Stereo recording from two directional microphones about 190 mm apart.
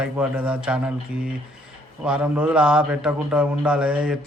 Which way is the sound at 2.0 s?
5° right (ahead or behind).